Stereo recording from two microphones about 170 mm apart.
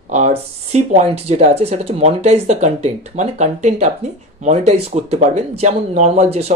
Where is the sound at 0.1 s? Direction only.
40° right (ahead or behind).